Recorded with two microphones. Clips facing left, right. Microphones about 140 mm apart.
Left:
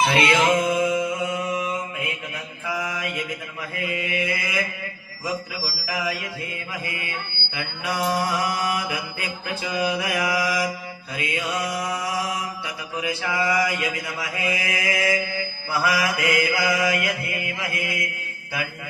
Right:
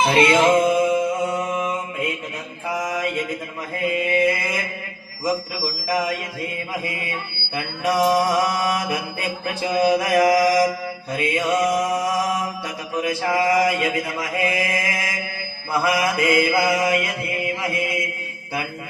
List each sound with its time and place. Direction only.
0.1 s music: 35° right (ahead or behind)
1.3 s mantra: 50° right (ahead or behind)
7.5 s mantra: 35° right (ahead or behind)